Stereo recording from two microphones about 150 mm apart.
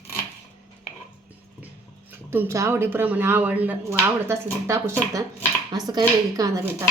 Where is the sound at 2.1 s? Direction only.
15° right (ahead or behind).